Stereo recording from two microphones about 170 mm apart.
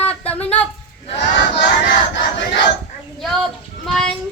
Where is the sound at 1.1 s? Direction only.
90° left.